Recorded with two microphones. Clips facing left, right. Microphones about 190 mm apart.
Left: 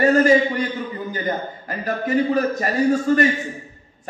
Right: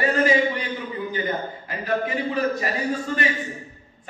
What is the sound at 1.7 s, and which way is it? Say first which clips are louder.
A man's voice: left 3 dB; 45° left (ahead or behind).